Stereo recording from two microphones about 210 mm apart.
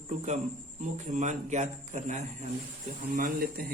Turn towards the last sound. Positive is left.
turn(degrees=-45)  # may be behind; listen again after turning